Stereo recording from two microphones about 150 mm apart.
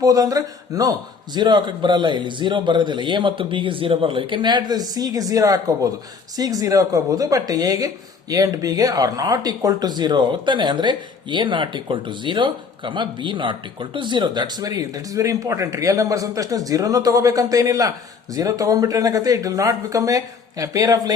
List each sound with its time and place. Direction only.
0.0 s a man's voice: 25° right (ahead or behind)